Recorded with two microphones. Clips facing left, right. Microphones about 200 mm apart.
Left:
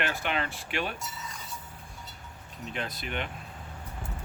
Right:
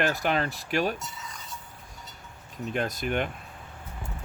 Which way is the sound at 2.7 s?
45° right (ahead or behind).